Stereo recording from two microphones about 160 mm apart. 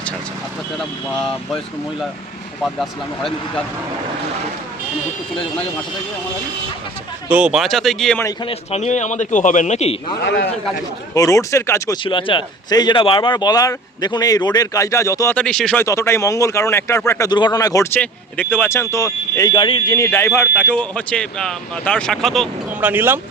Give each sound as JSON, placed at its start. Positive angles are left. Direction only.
{"t": 0.8, "sound": "speech", "side_deg": 5}
{"t": 2.7, "sound": "speech", "side_deg": 0}
{"t": 7.3, "sound": "speech", "side_deg": -5}
{"t": 8.4, "sound": "a man's voice", "side_deg": 45}
{"t": 10.2, "sound": "speech", "side_deg": 90}
{"t": 11.1, "sound": "speech", "side_deg": 20}
{"t": 12.0, "sound": "speech", "side_deg": 30}
{"t": 15.4, "sound": "speech", "side_deg": 5}
{"t": 15.8, "sound": "speech", "side_deg": 20}
{"t": 18.0, "sound": "speech", "side_deg": 10}
{"t": 22.8, "sound": "speech", "side_deg": -10}